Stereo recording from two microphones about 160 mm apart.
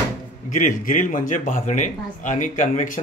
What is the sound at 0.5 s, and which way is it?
Speech, 55° left (ahead or behind).